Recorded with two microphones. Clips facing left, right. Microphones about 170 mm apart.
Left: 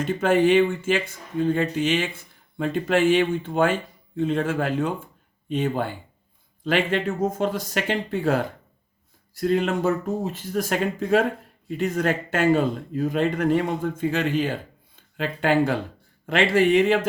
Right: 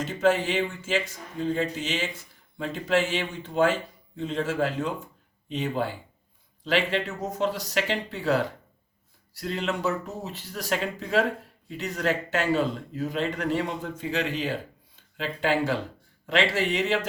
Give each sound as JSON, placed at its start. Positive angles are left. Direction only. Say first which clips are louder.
{"t": 0.0, "sound": "speech", "louder": "left 4 dB", "side_deg": 55}